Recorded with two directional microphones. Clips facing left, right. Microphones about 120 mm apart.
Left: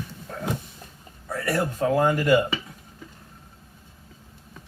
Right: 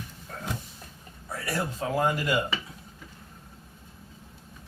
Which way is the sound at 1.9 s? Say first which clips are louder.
Left 5 dB; 40° left (ahead or behind).